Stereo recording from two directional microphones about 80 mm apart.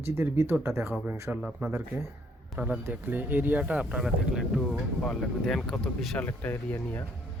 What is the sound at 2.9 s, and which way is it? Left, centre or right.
Speech, right.